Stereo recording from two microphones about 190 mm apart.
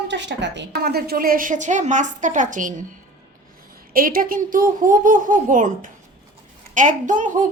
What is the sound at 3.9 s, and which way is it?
Speech, 50° right (ahead or behind).